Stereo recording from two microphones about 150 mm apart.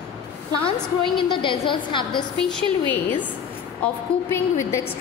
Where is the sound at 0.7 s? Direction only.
35° left (ahead or behind).